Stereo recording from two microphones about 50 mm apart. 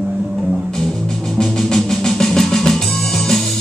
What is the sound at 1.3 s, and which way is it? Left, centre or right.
Music, centre.